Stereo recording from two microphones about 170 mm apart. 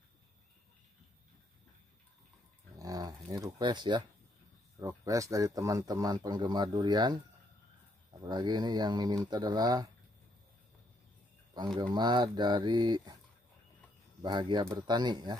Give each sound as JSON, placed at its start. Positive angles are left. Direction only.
{"t": 2.8, "sound": "dog", "side_deg": -20}
{"t": 4.7, "sound": "a man's voice", "side_deg": -20}
{"t": 8.2, "sound": "a man's voice", "side_deg": -25}
{"t": 11.5, "sound": "a man's voice", "side_deg": -25}
{"t": 14.2, "sound": "a man's voice", "side_deg": -25}